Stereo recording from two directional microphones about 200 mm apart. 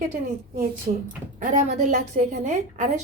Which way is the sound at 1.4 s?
40° right (ahead or behind).